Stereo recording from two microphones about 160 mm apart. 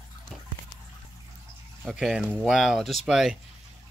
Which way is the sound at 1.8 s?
5° right (ahead or behind).